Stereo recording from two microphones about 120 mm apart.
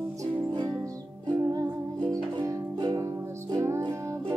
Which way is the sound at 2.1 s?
30° right (ahead or behind).